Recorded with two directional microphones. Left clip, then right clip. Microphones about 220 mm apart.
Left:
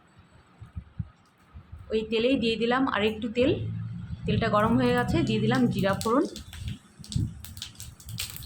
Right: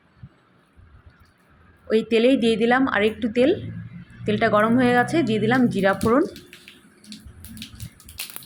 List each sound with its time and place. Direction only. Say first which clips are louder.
1.9 s speech: right 7 dB; 25° right (ahead or behind)